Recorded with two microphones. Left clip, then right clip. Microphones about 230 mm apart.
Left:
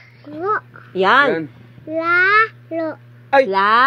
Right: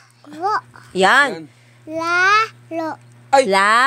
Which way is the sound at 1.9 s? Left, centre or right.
Right.